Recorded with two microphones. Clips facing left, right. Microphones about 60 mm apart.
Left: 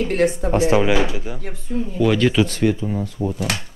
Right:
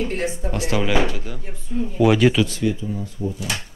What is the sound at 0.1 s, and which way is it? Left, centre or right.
Speech, left.